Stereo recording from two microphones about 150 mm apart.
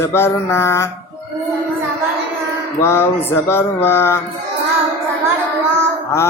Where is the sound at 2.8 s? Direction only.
15° left (ahead or behind).